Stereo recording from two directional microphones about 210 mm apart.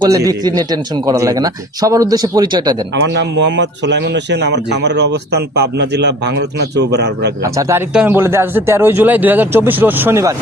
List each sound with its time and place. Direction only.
0.0 s a man's voice: 15° right (ahead or behind)
2.9 s a man's voice: 55° right (ahead or behind)
7.4 s a man's voice: 15° right (ahead or behind)